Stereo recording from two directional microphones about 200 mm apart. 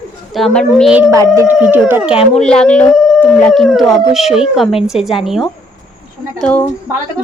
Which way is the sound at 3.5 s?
Centre (ahead or behind).